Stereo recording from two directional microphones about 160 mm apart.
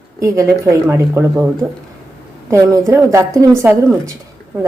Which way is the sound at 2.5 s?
20° right (ahead or behind).